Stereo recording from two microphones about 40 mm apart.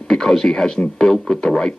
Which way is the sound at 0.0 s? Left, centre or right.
Centre.